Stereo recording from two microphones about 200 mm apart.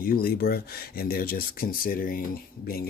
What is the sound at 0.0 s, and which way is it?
Speech, 45° left (ahead or behind).